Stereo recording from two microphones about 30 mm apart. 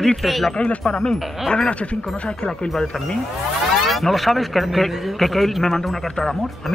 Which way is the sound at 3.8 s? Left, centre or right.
Centre.